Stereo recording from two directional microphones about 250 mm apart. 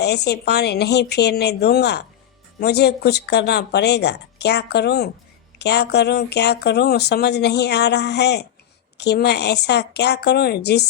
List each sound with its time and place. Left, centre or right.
0.0 s speech: left